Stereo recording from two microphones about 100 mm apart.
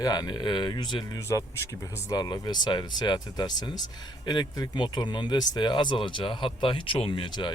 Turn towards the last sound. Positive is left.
turn(degrees=50)  # may be behind; listen again after turning